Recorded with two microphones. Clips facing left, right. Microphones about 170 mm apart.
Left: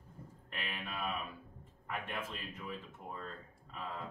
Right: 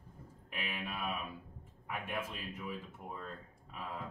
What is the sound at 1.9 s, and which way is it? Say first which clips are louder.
Speech: right 1 dB; 10° right (ahead or behind).